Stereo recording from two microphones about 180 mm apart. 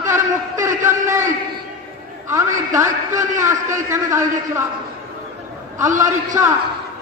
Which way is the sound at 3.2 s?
45° right (ahead or behind).